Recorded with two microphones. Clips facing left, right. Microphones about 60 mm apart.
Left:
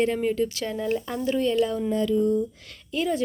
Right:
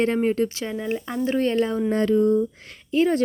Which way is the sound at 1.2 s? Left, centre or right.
Right.